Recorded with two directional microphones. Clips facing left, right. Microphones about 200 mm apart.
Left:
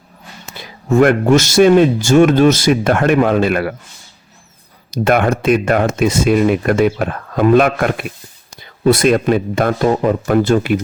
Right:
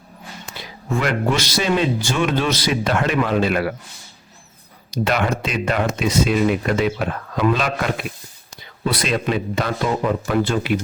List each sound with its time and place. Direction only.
0.9 s speech: 45° left (ahead or behind)
5.0 s speech: 50° left (ahead or behind)